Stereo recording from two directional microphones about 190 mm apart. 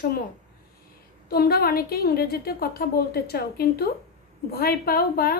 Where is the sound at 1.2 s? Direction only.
55° left (ahead or behind).